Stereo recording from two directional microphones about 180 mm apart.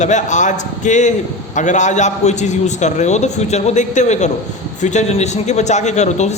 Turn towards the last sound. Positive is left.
turn(degrees=40)  # may be behind; listen again after turning